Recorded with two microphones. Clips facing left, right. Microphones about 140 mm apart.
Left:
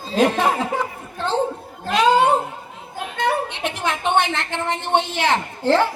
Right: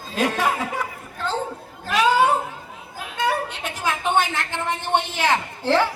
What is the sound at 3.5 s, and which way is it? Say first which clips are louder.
A woman's voice: left 2 dB; 25° left (ahead or behind).